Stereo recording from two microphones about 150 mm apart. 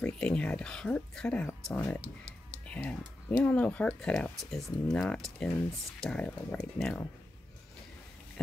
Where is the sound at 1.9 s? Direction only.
45° right (ahead or behind).